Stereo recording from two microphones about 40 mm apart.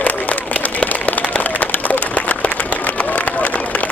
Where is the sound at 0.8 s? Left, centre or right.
Left.